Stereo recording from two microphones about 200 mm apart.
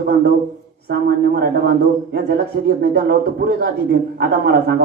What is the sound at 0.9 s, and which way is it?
A man's voice, 50° right (ahead or behind).